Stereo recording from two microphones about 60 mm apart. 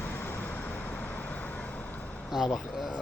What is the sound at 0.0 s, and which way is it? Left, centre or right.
Vehicle, left.